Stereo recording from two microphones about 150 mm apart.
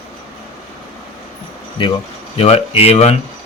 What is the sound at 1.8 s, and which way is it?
Speech, 35° left (ahead or behind).